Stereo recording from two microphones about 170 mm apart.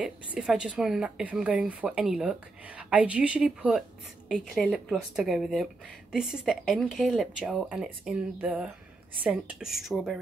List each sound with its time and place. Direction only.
0.0 s a woman's voice: 5° right (ahead or behind)